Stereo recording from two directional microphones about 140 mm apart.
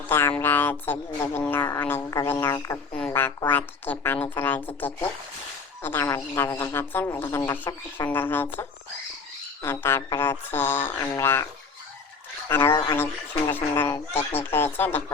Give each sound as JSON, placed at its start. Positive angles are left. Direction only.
{"t": 0.1, "sound": "speech", "side_deg": 15}
{"t": 12.5, "sound": "speech", "side_deg": 15}